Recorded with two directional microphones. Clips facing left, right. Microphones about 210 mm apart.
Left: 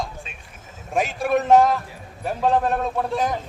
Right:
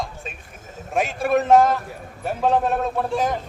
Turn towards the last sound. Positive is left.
turn(degrees=0)  # may be behind; listen again after turning